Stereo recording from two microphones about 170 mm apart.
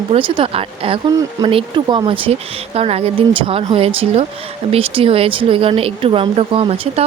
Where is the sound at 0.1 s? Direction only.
30° right (ahead or behind).